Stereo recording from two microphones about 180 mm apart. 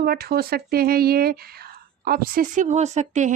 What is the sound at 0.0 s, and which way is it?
Speech, 60° right (ahead or behind).